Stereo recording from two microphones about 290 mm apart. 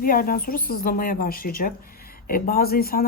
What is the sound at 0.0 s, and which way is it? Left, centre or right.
A woman's voice, left.